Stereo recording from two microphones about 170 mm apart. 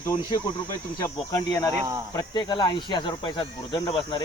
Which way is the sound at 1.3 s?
20° left (ahead or behind).